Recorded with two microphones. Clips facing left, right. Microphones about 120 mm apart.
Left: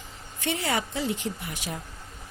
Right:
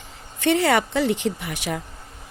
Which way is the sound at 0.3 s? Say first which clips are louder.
Right 9 dB; 75° right (ahead or behind).